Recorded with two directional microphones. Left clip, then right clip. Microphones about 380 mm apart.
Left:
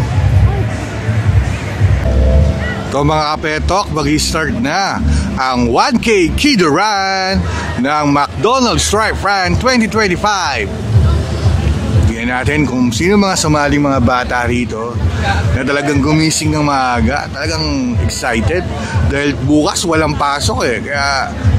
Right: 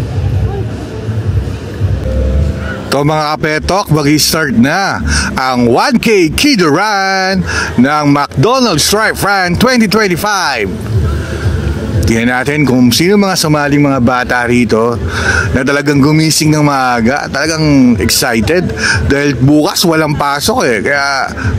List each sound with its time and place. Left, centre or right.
2.9 s speech: right
12.1 s speech: right